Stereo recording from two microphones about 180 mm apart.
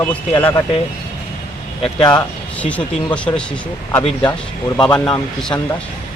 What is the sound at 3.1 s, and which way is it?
Speech, 5° left (ahead or behind).